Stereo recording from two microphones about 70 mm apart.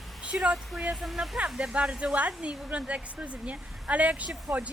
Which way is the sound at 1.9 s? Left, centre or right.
Centre.